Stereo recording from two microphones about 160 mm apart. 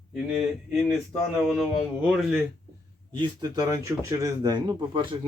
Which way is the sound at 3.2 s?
25° right (ahead or behind).